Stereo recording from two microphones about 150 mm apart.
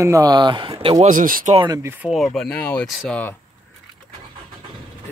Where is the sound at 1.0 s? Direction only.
60° right (ahead or behind).